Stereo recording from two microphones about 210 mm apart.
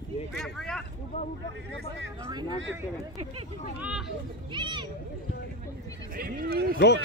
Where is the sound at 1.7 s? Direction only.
55° right (ahead or behind).